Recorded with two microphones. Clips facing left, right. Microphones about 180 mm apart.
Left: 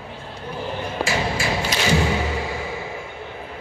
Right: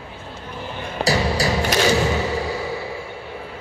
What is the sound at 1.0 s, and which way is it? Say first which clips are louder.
Music: right 5 dB; 35° right (ahead or behind).